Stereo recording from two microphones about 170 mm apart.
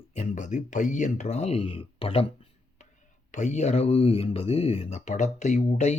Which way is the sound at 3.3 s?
45° left (ahead or behind).